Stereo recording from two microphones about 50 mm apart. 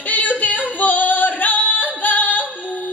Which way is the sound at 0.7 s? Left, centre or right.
Left.